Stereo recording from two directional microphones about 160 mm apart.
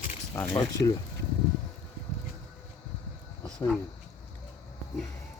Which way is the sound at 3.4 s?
5° left (ahead or behind).